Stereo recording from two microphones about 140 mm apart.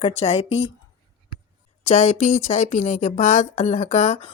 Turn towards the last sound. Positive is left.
turn(degrees=55)  # may be behind; listen again after turning